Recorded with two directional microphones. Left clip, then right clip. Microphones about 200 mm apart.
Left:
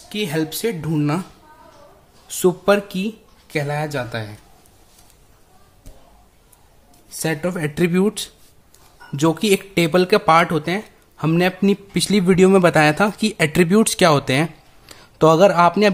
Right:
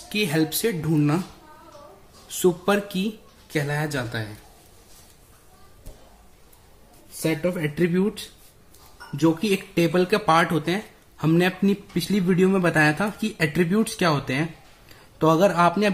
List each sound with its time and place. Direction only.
0.1 s speech: 10° left (ahead or behind)
2.2 s speech: 30° left (ahead or behind)
7.2 s speech: 50° left (ahead or behind); by 15.9 s 30° left (ahead or behind)